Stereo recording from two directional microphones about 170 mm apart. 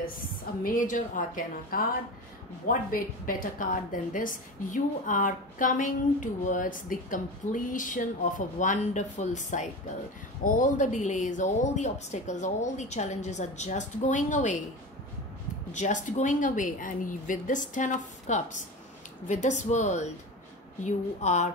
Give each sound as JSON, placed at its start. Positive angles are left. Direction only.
{"t": 0.7, "sound": "a woman's voice", "side_deg": 50}
{"t": 15.7, "sound": "a woman's voice", "side_deg": 45}